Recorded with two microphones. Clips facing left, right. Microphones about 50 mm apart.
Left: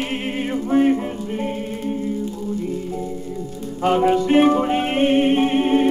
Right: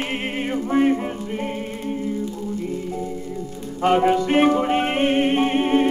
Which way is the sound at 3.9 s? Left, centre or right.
Right.